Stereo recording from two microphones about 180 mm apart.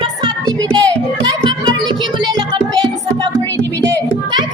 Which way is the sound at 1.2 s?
25° right (ahead or behind).